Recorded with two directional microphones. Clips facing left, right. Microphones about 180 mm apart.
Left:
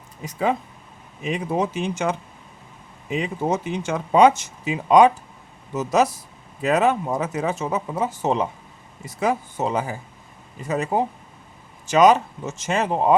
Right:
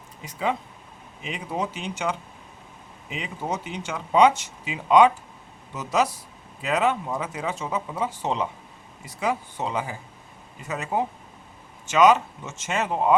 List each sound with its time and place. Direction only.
0.3 s speech: 45° left (ahead or behind)
3.2 s speech: 45° left (ahead or behind)